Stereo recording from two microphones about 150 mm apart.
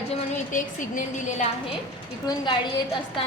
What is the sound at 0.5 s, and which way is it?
Speech, 60° left (ahead or behind).